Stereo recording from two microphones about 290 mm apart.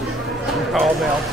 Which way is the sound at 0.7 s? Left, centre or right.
Centre.